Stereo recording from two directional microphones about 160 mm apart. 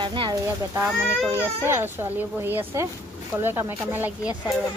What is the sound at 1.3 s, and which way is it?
Speech, 15° right (ahead or behind).